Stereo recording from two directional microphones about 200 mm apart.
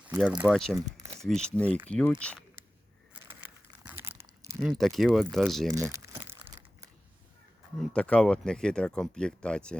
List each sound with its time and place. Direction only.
0.4 s speech: centre (ahead or behind)
0.9 s a sound: 15° right (ahead or behind)
1.3 s speech: 5° left (ahead or behind)
3.8 s crumpling: 10° right (ahead or behind)
4.8 s speech: centre (ahead or behind)
5.7 s crumpling: 15° right (ahead or behind)
7.8 s speech: 5° left (ahead or behind)